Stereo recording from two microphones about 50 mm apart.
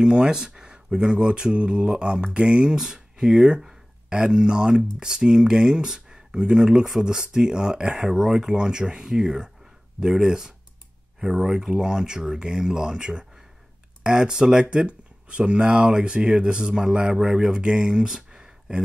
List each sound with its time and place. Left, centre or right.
0.0 s speech: centre